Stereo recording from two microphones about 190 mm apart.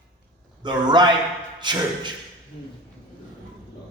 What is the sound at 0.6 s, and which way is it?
A man's voice, 25° right (ahead or behind).